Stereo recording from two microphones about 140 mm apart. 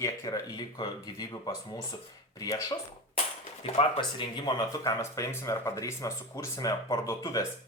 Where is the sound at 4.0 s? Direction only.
30° left (ahead or behind).